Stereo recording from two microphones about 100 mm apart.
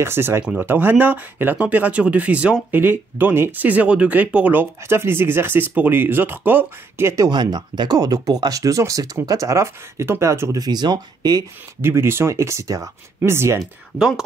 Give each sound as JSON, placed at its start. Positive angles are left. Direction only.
{"t": 0.0, "sound": "speech", "side_deg": -25}
{"t": 7.2, "sound": "speech", "side_deg": -45}
{"t": 10.6, "sound": "speech", "side_deg": -45}
{"t": 11.8, "sound": "speech", "side_deg": -25}
{"t": 13.6, "sound": "speech", "side_deg": -5}